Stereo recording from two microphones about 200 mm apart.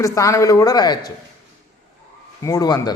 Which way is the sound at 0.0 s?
15° left (ahead or behind).